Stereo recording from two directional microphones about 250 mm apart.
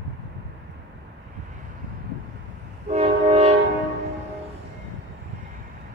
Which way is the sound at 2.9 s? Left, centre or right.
Right.